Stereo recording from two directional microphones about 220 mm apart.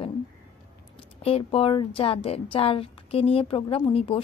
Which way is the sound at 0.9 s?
25° left (ahead or behind).